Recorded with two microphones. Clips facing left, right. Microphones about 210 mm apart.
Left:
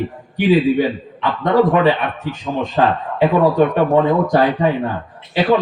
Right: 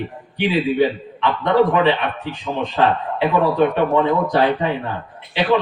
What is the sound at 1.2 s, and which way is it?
A man's voice, 45° left (ahead or behind).